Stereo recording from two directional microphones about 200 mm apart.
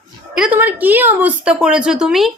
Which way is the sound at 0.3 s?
5° right (ahead or behind).